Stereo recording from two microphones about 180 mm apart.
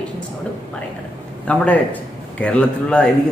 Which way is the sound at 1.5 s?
5° left (ahead or behind).